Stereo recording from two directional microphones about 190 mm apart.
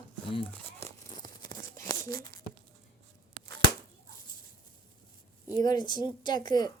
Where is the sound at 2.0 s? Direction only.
50° right (ahead or behind).